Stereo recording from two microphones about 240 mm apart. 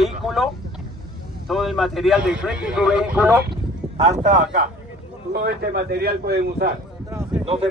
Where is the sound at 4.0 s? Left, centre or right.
Right.